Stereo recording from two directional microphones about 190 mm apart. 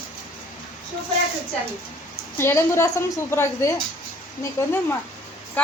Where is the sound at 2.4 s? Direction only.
15° left (ahead or behind).